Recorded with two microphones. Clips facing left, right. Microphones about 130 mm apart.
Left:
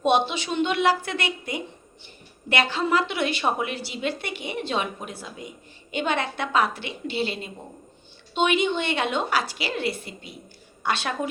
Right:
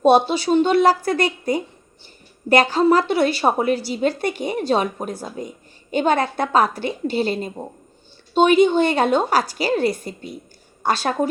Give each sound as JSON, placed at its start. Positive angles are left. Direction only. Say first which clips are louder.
{"t": 0.0, "sound": "a woman's voice", "louder": "right 7 dB", "side_deg": -40}